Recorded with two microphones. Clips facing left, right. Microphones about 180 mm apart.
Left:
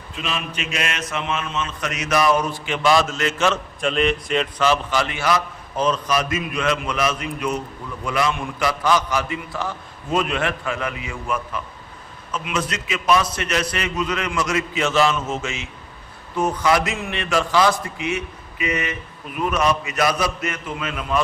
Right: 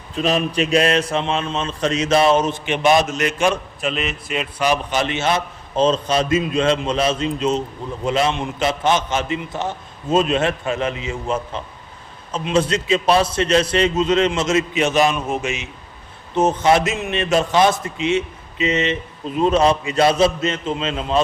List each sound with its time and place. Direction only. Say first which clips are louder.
0.2 s a man's voice: right 10 dB; 40° right (ahead or behind); by 3.6 s 15° right (ahead or behind)
3.8 s a man's voice: left 4 dB; 5° right (ahead or behind); by 21.2 s 25° right (ahead or behind)